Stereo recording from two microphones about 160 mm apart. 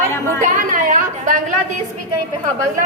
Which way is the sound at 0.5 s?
55° right (ahead or behind).